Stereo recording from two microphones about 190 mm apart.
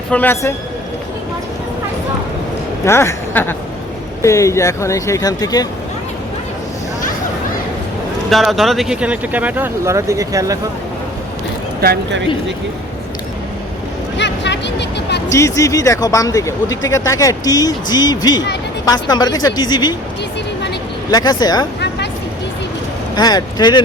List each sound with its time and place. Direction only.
0.1 s speech: 10° left (ahead or behind)
2.8 s a woman's voice: 15° left (ahead or behind)
8.3 s speech: centre (ahead or behind); by 10.6 s 15° right (ahead or behind)
11.8 s speech: 55° right (ahead or behind)
14.2 s vehicle: 70° left (ahead or behind)
15.3 s speech: 15° left (ahead or behind)
21.1 s speech: 20° left (ahead or behind)
21.8 s vehicle: 65° left (ahead or behind)
23.1 s speech: 20° left (ahead or behind)